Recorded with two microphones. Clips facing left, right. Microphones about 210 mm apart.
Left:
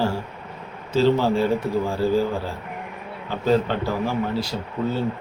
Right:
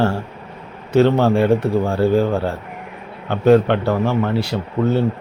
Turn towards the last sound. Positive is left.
turn(degrees=-65)  # may be behind; listen again after turning